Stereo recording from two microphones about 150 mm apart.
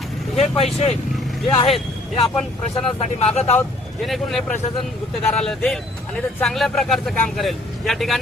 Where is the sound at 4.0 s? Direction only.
Centre (ahead or behind).